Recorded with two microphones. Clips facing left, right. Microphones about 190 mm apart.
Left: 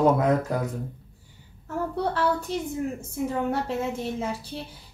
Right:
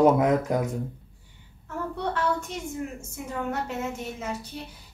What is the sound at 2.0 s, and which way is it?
A woman's voice, 35° left (ahead or behind).